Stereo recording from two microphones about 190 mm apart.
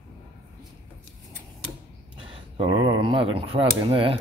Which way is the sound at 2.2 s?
25° right (ahead or behind).